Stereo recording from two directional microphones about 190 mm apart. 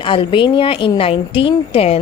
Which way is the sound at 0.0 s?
25° left (ahead or behind).